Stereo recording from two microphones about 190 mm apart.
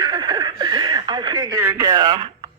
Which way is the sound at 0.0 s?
25° right (ahead or behind).